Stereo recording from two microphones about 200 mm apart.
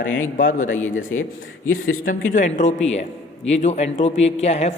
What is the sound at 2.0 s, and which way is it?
A woman's voice, 40° left (ahead or behind).